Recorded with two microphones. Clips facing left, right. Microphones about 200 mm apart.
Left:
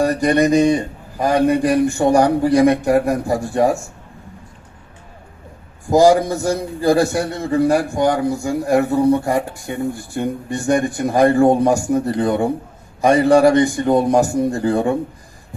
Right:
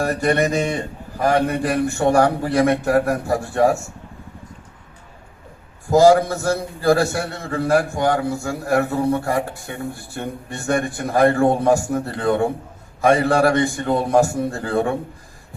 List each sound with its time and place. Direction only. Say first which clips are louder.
0.0 s a man's voice: left 4 dB; 15° left (ahead or behind)
5.9 s a man's voice: left 1 dB; 15° left (ahead or behind)